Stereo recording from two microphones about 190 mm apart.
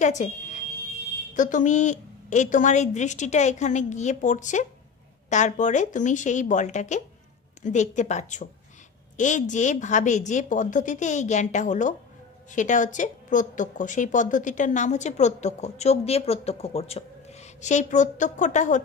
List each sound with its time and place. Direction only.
0.0 s fire alarm: 40° left (ahead or behind)
1.3 s a woman's voice: 40° left (ahead or behind)